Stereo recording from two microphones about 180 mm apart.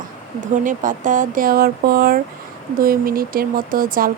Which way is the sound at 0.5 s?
45° right (ahead or behind).